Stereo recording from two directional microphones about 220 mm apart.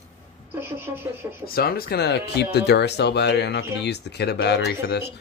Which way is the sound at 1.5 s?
45° left (ahead or behind).